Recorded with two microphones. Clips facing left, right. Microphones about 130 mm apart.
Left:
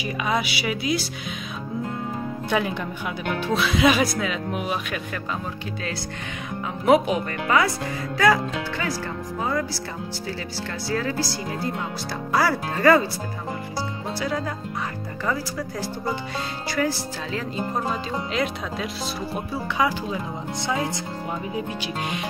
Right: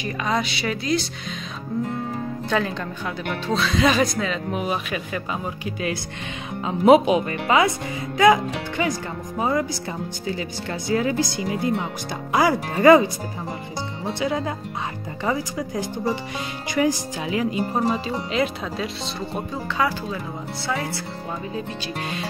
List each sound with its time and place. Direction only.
0.3 s speech: 5° left (ahead or behind)
2.5 s speech: 15° left (ahead or behind)
6.9 s speech: 20° right (ahead or behind)
10.9 s speech: 20° right (ahead or behind)
16.7 s speech: 15° right (ahead or behind)
20.6 s speech: 15° left (ahead or behind)